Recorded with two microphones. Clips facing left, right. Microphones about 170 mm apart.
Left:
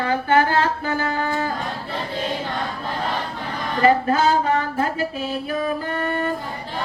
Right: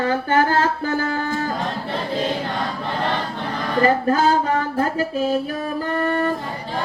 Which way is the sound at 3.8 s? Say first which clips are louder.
Even; 40° right (ahead or behind).